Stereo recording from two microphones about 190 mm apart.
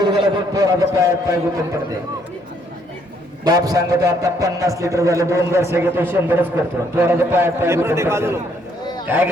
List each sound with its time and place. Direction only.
0.0 s a man's voice: 20° right (ahead or behind)
3.4 s a man's voice: 20° right (ahead or behind)